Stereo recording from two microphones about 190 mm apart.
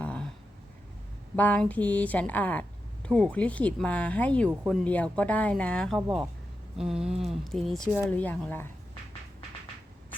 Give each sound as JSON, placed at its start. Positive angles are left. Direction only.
{"t": 0.0, "sound": "a sound", "side_deg": 5}
{"t": 1.4, "sound": "speech", "side_deg": 10}
{"t": 6.0, "sound": "speech", "side_deg": -20}
{"t": 6.7, "sound": "speech", "side_deg": -5}